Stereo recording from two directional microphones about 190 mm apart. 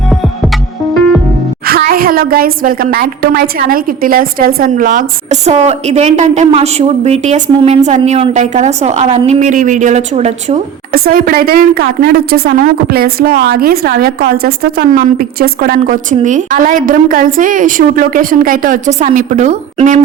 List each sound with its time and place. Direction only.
1.6 s a woman's voice: 55° right (ahead or behind); by 10.6 s 35° right (ahead or behind)
10.9 s a woman's voice: 50° right (ahead or behind)